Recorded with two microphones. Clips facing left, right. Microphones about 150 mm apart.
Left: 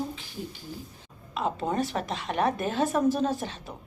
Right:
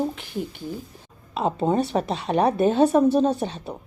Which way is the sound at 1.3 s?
30° right (ahead or behind).